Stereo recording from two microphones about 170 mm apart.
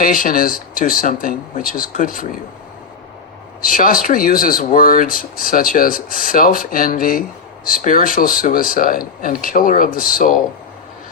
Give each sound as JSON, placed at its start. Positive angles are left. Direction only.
{"t": 0.0, "sound": "speech", "side_deg": 55}
{"t": 3.6, "sound": "speech", "side_deg": 55}